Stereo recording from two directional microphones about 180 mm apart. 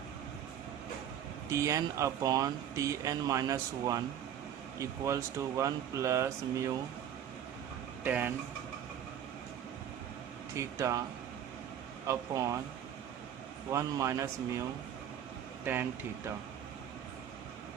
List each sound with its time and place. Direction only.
1.5 s speech: 15° right (ahead or behind)
8.0 s speech: 10° right (ahead or behind)
10.5 s speech: 15° right (ahead or behind)
12.0 s speech: 20° right (ahead or behind)
13.7 s speech: 15° right (ahead or behind)
15.6 s speech: 10° right (ahead or behind)